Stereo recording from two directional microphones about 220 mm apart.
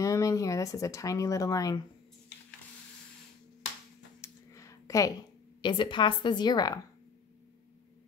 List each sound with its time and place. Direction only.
0.0 s speech: 15° left (ahead or behind)
4.2 s a sound: 15° left (ahead or behind)
5.6 s a woman's voice: 20° left (ahead or behind)